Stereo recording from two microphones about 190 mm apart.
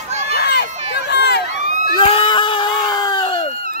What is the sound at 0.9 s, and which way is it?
Run, 60° left (ahead or behind).